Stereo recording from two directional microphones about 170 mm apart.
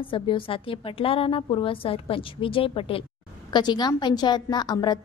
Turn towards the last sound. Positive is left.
turn(degrees=25)  # may be behind; listen again after turning